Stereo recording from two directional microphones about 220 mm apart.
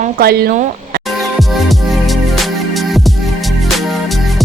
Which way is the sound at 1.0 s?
Centre (ahead or behind).